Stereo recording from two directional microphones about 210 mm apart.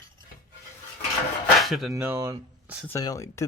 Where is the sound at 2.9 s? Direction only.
15° left (ahead or behind).